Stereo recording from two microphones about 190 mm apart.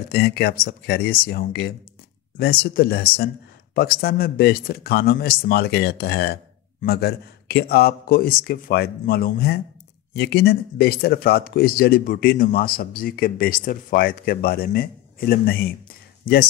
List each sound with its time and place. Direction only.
0.1 s speech: 55° left (ahead or behind)